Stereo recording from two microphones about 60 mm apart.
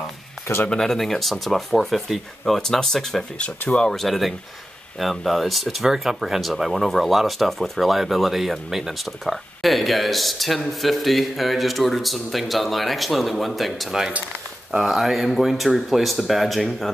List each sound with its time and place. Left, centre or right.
0.7 s speech: centre
3.3 s speech: centre
3.9 s speech: centre